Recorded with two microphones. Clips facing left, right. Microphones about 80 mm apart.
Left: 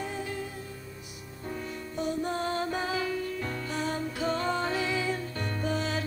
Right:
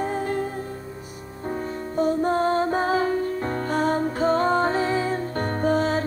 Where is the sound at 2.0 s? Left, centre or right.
Right.